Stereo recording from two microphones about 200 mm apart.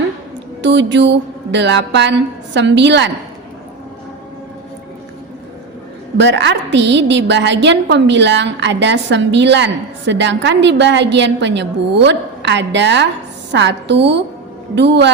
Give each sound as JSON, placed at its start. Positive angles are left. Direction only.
{"t": 0.6, "sound": "a woman's voice", "side_deg": -60}
{"t": 6.1, "sound": "a woman's voice", "side_deg": -65}